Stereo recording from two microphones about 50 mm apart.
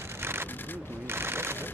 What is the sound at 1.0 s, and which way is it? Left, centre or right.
Sewing machine, right.